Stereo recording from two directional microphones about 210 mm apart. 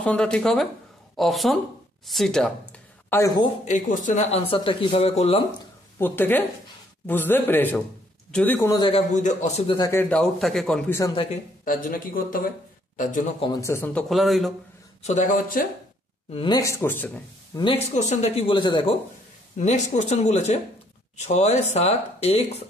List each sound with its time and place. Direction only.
0.0 s a man's voice: 5° left (ahead or behind)
3.1 s speech: 15° left (ahead or behind)
3.6 s speech: 35° left (ahead or behind)
5.9 s a man's voice: 10° left (ahead or behind)
8.8 s speech: 30° left (ahead or behind)
9.8 s a man's voice: 15° left (ahead or behind)
11.6 s a man's voice: 40° left (ahead or behind)
13.4 s a man's voice: 15° left (ahead or behind); by 14.5 s centre (ahead or behind)
15.0 s speech: 35° left (ahead or behind)
16.3 s a man's voice: 25° left (ahead or behind)
17.6 s speech: 25° left (ahead or behind)
19.6 s speech: 35° left (ahead or behind)